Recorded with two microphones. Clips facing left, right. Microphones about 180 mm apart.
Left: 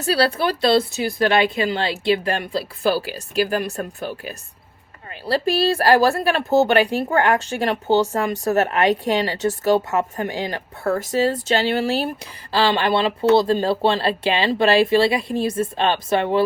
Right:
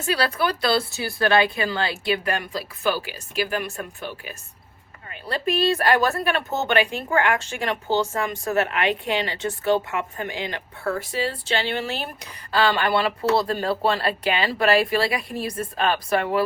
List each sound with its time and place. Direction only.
0.0 s speech: 35° left (ahead or behind)